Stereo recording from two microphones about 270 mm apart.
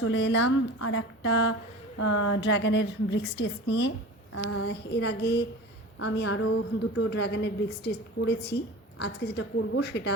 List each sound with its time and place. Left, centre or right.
0.0 s a woman's voice: left
2.0 s speech: left
2.4 s a woman's voice: left
4.4 s a woman's voice: left